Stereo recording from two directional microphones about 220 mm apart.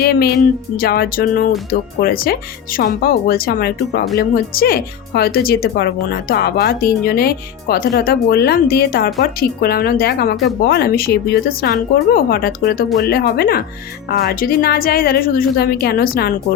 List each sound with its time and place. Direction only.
0.0 s speech: 45° left (ahead or behind)